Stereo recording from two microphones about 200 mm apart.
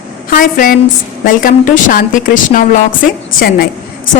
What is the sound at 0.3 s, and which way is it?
Speech, 45° left (ahead or behind).